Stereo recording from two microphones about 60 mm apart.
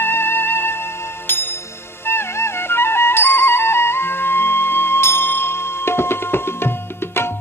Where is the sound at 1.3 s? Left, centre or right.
Left.